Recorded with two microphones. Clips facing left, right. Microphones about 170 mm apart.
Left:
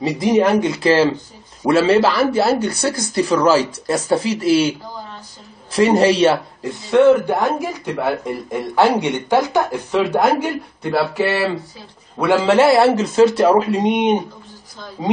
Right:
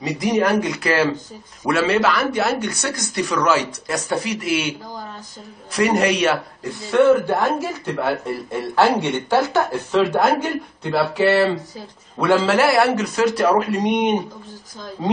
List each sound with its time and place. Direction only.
0.0 s a man's voice: 25° left (ahead or behind)
10.8 s a sound: 5° left (ahead or behind)
12.4 s a man's voice: 25° left (ahead or behind)